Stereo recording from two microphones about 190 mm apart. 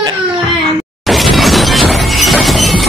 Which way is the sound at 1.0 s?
Centre (ahead or behind).